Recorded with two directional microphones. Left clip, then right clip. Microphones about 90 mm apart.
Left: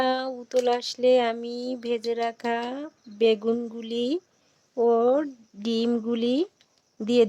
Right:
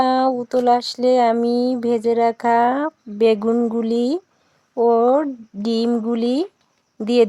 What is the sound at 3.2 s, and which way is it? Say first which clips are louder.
Speech: right 6 dB; 35° right (ahead or behind).